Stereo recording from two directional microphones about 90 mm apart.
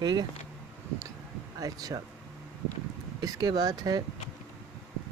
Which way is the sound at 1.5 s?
40° right (ahead or behind).